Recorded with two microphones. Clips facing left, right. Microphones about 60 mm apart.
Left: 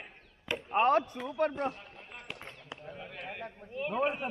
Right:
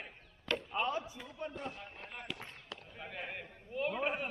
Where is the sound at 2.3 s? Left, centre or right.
Left.